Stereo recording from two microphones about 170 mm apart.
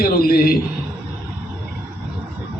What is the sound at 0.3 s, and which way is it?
Speech, 60° left (ahead or behind).